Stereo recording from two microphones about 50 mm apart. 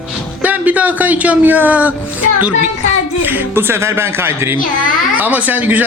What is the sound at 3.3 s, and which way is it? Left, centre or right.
Speech, right.